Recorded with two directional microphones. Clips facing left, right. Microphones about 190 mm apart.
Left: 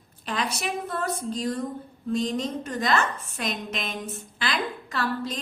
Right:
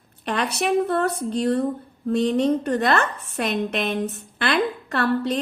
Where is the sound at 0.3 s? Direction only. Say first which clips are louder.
Right 7 dB; 65° right (ahead or behind).